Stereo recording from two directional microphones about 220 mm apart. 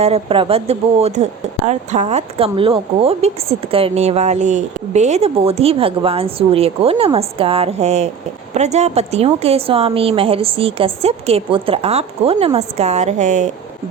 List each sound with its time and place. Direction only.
0.0 s speech: 25° right (ahead or behind)